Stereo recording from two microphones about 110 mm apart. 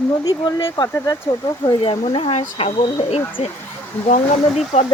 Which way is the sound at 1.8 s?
55° left (ahead or behind).